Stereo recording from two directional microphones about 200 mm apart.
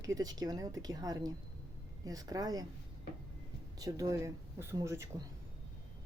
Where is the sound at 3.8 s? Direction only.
15° right (ahead or behind).